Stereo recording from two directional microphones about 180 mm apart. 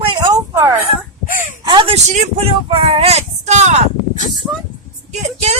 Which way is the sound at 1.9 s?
35° right (ahead or behind).